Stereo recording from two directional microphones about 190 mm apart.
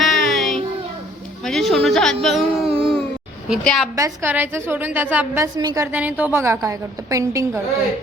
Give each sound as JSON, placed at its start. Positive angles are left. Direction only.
{"t": 0.0, "sound": "child singing", "side_deg": 0}
{"t": 1.5, "sound": "a sound", "side_deg": 0}
{"t": 2.2, "sound": "speech", "side_deg": 0}
{"t": 2.6, "sound": "baby cry", "side_deg": -30}
{"t": 3.5, "sound": "a woman's voice", "side_deg": 0}
{"t": 3.9, "sound": "a woman's voice", "side_deg": -15}